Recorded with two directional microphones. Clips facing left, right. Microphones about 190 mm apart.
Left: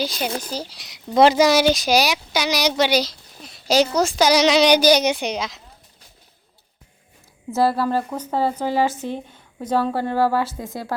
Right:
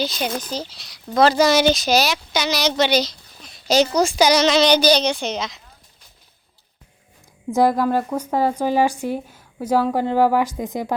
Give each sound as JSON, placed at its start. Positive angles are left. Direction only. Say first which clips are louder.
{"t": 0.0, "sound": "speech", "louder": "right 1 dB", "side_deg": 10}
{"t": 7.5, "sound": "speech", "louder": "right 2 dB", "side_deg": -15}